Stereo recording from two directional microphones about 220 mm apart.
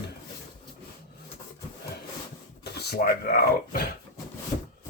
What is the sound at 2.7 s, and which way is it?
Speech, 50° left (ahead or behind).